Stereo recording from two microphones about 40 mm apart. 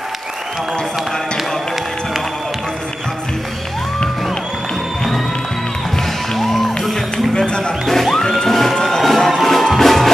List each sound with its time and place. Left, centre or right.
6.3 s music: centre
7.3 s a sound: left
7.9 s music: centre